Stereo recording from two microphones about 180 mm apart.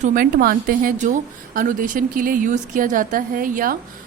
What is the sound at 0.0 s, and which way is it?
A woman's voice, 50° right (ahead or behind).